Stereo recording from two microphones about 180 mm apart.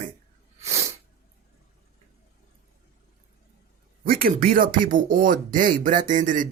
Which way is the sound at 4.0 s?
55° right (ahead or behind).